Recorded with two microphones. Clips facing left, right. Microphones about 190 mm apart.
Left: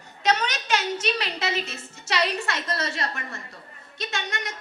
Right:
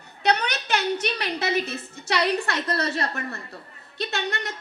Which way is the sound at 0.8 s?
60° right (ahead or behind).